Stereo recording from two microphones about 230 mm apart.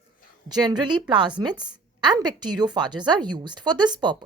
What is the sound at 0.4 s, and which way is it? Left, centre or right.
Speech, centre.